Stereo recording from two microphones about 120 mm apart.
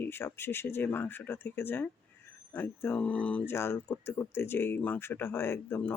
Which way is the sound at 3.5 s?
20° left (ahead or behind).